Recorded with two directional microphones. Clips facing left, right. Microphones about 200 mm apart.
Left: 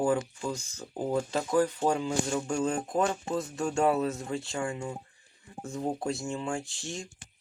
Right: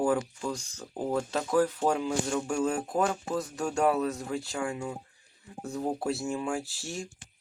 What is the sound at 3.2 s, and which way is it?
Speech, 25° left (ahead or behind).